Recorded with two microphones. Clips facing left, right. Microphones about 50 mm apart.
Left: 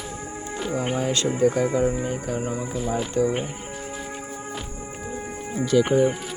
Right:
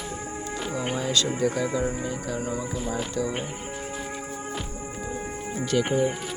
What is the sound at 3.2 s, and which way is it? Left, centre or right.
Speech, left.